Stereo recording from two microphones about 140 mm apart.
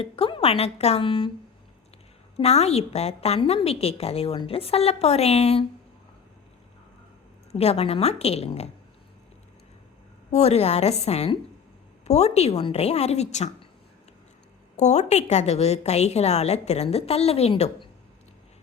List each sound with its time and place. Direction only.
0.0 s a woman's voice: 40° left (ahead or behind)
2.3 s a woman's voice: 50° left (ahead or behind)
7.5 s a woman's voice: 45° left (ahead or behind)
10.3 s a woman's voice: 50° left (ahead or behind)
14.8 s a woman's voice: 55° left (ahead or behind)